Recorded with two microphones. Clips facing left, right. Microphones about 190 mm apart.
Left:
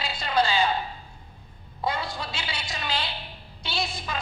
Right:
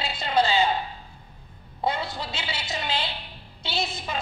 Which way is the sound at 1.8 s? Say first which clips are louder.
Right 2 dB; 25° right (ahead or behind).